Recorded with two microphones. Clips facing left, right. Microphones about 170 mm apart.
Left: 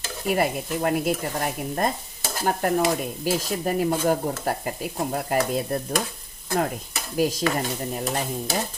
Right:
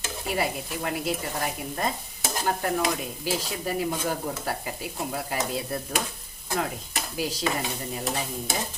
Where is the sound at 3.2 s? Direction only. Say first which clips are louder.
Left 4 dB; 50° left (ahead or behind).